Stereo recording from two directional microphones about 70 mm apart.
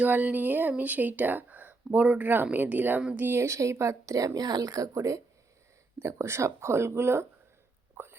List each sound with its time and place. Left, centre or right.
0.0 s a woman's voice: right
4.4 s speech: right
8.0 s whispering: right